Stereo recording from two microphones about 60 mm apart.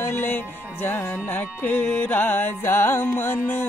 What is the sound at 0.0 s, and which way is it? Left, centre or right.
Music, left.